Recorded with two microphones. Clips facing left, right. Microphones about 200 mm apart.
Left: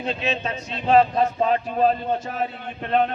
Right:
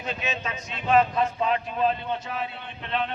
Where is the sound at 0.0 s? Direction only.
35° left (ahead or behind).